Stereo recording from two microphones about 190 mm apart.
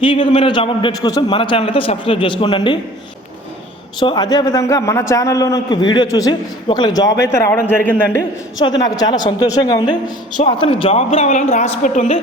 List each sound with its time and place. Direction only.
0.0 s a man's voice: 25° left (ahead or behind)
4.0 s a man's voice: 20° left (ahead or behind)
8.6 s a man's voice: 20° left (ahead or behind)